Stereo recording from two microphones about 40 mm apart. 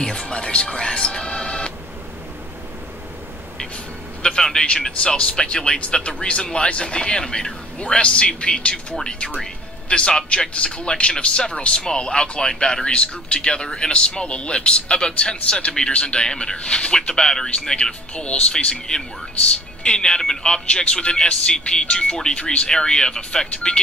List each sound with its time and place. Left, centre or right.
0.0 s music: left
4.2 s a sound: left
4.6 s speech: centre
18.1 s speech: left
18.5 s speech: centre